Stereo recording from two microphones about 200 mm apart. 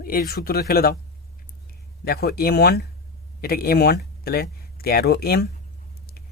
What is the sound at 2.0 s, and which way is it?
Speech, 50° left (ahead or behind).